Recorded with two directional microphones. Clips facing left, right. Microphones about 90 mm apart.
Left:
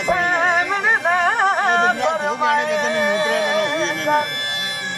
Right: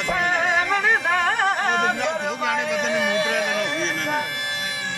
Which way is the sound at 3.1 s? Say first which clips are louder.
Left 4 dB; 45° left (ahead or behind).